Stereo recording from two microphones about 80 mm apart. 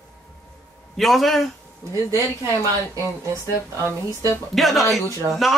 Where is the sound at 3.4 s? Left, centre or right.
Left.